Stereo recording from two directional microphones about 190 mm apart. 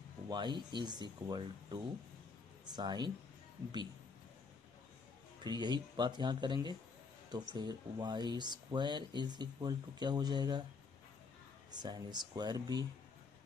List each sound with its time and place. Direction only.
0.3 s speech: 25° right (ahead or behind)
5.4 s speech: 20° right (ahead or behind)
11.7 s speech: 20° right (ahead or behind)